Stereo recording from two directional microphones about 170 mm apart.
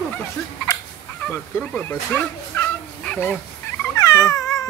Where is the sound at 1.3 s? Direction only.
10° left (ahead or behind).